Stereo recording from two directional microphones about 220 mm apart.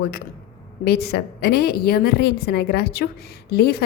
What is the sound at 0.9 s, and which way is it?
A woman's voice, 45° left (ahead or behind).